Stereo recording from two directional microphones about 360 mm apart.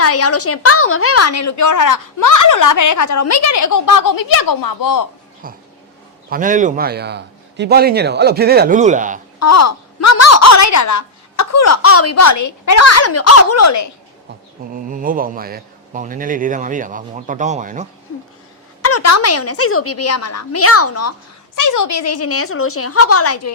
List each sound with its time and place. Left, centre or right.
0.0 s a woman's voice: left
6.3 s a man's voice: right
9.4 s a woman's voice: left
14.8 s a man's voice: right
18.8 s speech: left
21.5 s speech: left